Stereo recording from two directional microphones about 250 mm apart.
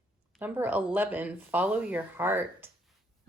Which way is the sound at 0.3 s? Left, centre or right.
Centre.